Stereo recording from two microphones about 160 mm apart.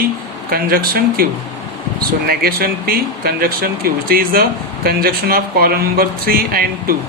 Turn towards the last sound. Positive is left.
turn(degrees=-70)  # may be behind; listen again after turning